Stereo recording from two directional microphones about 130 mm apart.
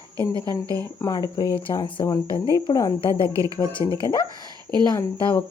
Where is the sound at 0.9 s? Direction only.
25° left (ahead or behind).